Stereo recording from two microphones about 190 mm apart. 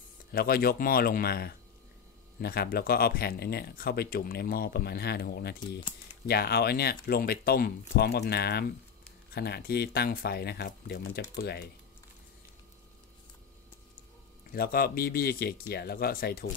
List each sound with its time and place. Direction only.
0.3 s speech: 50° left (ahead or behind)
14.5 s speech: 50° left (ahead or behind)